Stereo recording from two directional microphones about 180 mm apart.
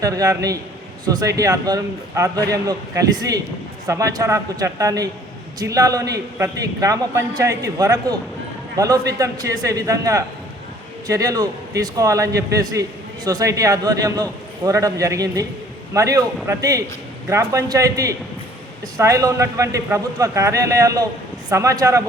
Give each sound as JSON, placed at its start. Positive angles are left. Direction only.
{"t": 0.0, "sound": "a man's voice", "side_deg": -20}